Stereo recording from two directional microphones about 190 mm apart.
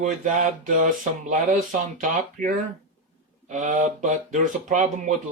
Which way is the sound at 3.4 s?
40° right (ahead or behind).